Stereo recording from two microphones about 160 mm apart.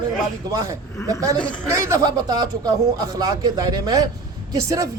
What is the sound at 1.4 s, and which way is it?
Speech, 5° left (ahead or behind).